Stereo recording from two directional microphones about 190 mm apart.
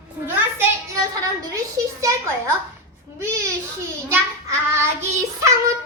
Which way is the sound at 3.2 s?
15° right (ahead or behind).